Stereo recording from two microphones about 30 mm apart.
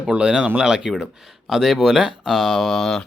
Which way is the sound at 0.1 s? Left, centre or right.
Right.